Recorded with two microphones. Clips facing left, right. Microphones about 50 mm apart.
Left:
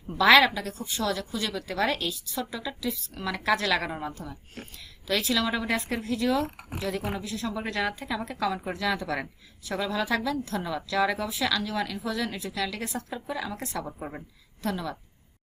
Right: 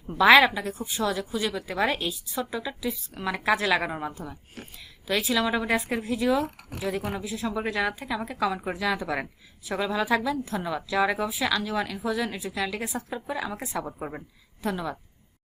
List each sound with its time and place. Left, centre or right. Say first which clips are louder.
0.2 s a woman's voice: right 2 dB; centre